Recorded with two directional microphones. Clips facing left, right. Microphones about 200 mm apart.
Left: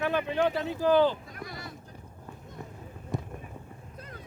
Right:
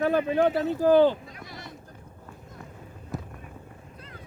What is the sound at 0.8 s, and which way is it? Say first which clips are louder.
Speech: right 4 dB; 45° right (ahead or behind).